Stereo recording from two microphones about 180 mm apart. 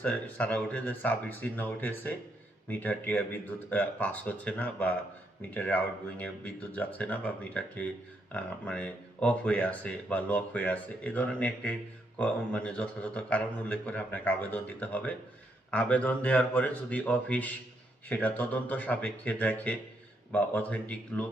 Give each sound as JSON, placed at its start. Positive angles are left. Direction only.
{"t": 0.0, "sound": "speech", "side_deg": 10}